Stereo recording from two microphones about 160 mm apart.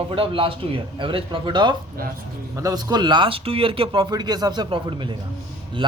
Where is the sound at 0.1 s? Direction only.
35° right (ahead or behind).